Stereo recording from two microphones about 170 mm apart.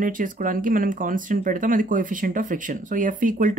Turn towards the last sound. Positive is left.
turn(degrees=-50)  # may be behind; listen again after turning